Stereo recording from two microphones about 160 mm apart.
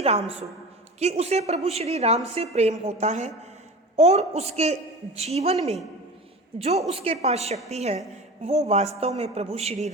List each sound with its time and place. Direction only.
0.0 s a woman's voice: 40° right (ahead or behind)